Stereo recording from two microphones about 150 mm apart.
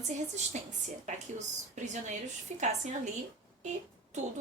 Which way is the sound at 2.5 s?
50° right (ahead or behind).